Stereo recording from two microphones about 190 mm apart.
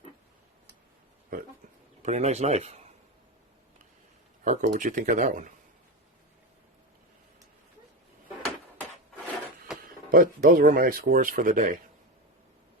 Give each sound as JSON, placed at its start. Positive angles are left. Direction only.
{"t": 2.0, "sound": "speech", "side_deg": -35}
{"t": 4.4, "sound": "speech", "side_deg": -40}
{"t": 9.8, "sound": "speech", "side_deg": -50}